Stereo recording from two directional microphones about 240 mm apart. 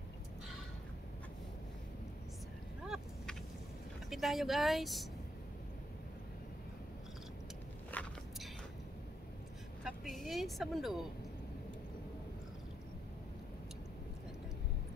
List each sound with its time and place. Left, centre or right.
2.9 s vehicle: centre
4.1 s speech: centre
7.9 s walk: centre
9.8 s a woman's voice: centre